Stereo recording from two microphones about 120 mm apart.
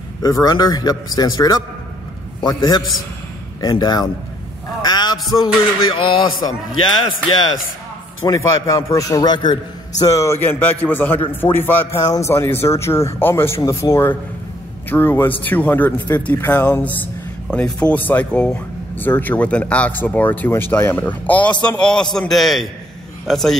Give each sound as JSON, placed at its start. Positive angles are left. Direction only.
{"t": 0.2, "sound": "a man's voice", "side_deg": 30}
{"t": 4.8, "sound": "a sound", "side_deg": 35}
{"t": 5.4, "sound": "a man's voice", "side_deg": 45}
{"t": 8.3, "sound": "a man's voice", "side_deg": 30}